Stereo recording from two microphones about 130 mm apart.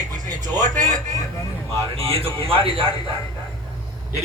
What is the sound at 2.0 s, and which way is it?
Speech, 45° right (ahead or behind).